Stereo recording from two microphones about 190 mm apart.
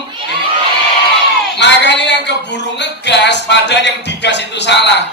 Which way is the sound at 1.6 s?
65° left (ahead or behind).